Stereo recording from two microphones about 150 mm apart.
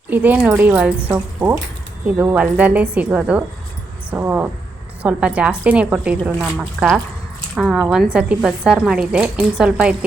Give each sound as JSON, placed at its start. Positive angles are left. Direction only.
{"t": 0.1, "sound": "a woman's voice", "side_deg": -10}